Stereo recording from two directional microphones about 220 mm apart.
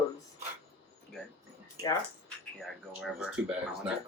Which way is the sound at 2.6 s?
Centre (ahead or behind).